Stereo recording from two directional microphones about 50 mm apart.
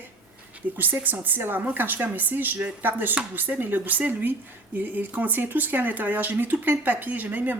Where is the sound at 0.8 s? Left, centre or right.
Right.